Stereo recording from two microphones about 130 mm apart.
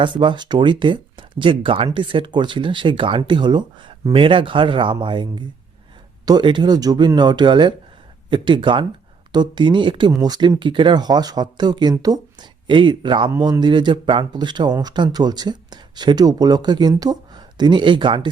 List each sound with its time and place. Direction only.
0.0 s speech: 40° right (ahead or behind)